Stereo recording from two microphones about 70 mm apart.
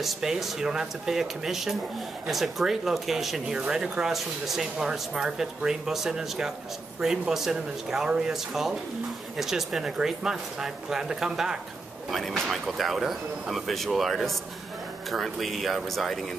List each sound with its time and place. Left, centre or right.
0.0 s speech: centre
12.1 s speech: centre